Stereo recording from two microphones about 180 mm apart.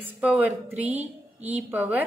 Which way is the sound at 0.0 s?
10° right (ahead or behind).